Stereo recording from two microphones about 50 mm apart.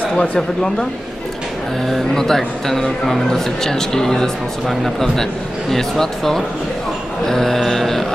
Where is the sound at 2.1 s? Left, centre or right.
Centre.